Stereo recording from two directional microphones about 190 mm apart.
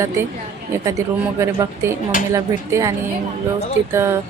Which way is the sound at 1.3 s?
15° right (ahead or behind).